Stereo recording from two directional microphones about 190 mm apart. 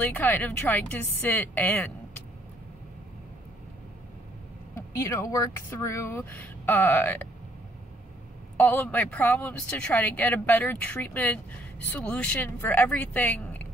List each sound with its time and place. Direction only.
0.0 s speech: 10° left (ahead or behind)
4.7 s speech: 15° left (ahead or behind)
8.5 s speech: 10° left (ahead or behind)